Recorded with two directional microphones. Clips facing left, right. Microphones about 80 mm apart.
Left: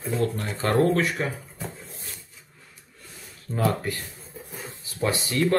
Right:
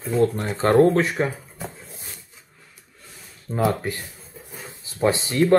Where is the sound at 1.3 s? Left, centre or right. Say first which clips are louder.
Right 1 dB; centre.